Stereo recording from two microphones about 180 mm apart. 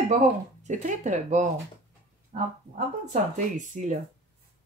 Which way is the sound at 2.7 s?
40° right (ahead or behind).